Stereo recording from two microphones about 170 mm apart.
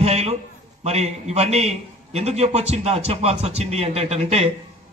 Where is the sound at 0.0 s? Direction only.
40° right (ahead or behind).